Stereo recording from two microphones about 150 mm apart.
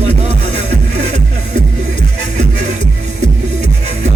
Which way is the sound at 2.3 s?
50° right (ahead or behind).